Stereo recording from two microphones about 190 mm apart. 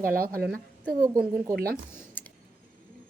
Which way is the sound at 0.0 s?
50° right (ahead or behind).